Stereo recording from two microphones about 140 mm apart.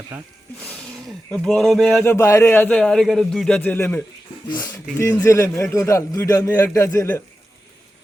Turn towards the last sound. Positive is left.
turn(degrees=20)  # may be behind; listen again after turning